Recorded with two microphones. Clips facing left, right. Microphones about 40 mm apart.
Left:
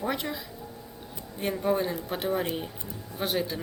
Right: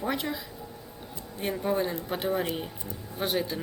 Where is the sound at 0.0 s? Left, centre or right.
Centre.